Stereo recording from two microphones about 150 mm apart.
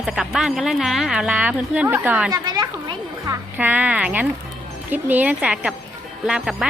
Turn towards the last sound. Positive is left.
turn(degrees=-5)  # may be behind; listen again after turning